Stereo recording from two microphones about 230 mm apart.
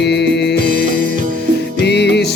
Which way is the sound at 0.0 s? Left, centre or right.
Left.